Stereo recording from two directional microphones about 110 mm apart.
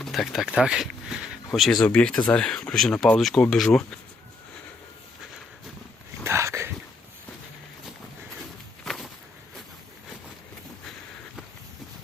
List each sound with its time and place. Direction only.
0.0 s speech: centre (ahead or behind)
1.9 s speech: 10° left (ahead or behind)
6.2 s a sound: 25° right (ahead or behind)
8.8 s walk: 5° left (ahead or behind)